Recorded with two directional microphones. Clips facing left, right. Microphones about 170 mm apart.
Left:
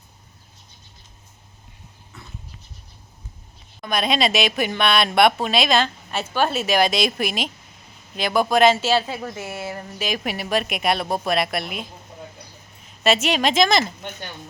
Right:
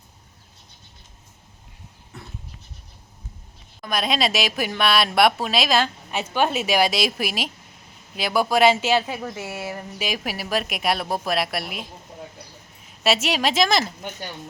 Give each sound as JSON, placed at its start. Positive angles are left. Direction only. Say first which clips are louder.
{"t": 3.8, "sound": "a woman's voice", "louder": "left 2 dB", "side_deg": 0}
{"t": 13.0, "sound": "speech", "louder": "left 2 dB", "side_deg": -5}